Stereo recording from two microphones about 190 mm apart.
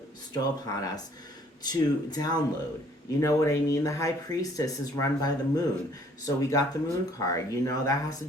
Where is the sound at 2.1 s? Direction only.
20° left (ahead or behind).